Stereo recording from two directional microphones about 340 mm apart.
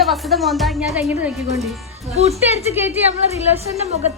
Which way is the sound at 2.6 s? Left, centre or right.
Centre.